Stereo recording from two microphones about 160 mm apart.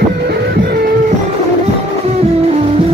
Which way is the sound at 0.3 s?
80° right.